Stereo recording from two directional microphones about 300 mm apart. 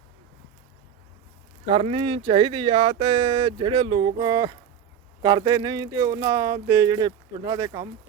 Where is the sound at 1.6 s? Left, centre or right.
Centre.